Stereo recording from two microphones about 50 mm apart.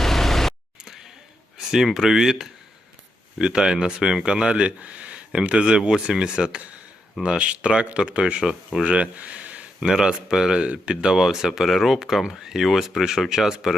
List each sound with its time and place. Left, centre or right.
0.0 s vehicle: centre
1.5 s speech: centre
3.3 s speech: centre
8.8 s speech: right
9.8 s speech: centre
11.2 s speech: centre